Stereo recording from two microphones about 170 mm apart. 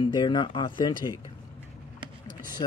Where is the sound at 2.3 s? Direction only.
55° right (ahead or behind).